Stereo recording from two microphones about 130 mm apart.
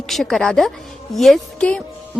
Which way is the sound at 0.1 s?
Centre (ahead or behind).